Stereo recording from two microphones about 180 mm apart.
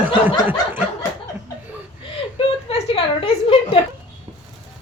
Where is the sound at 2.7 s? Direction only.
30° left (ahead or behind).